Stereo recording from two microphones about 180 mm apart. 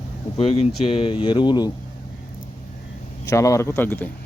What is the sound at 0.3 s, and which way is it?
Speech, 35° left (ahead or behind).